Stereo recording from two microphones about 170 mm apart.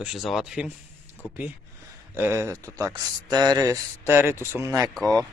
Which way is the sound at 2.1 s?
15° right (ahead or behind).